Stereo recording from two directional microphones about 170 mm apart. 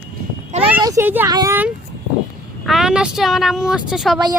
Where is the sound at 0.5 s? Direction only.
45° right (ahead or behind).